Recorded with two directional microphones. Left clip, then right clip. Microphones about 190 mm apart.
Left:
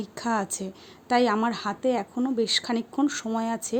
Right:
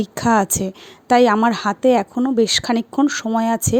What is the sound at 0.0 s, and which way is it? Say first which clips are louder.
A woman's voice: right 11 dB; 40° right (ahead or behind).